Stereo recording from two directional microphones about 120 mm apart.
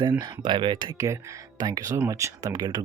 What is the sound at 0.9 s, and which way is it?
Speech, 25° right (ahead or behind).